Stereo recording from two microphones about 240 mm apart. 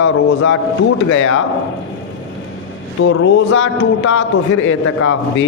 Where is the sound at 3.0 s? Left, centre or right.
Left.